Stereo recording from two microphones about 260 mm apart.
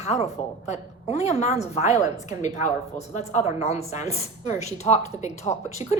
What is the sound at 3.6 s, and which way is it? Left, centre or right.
A woman's voice, left.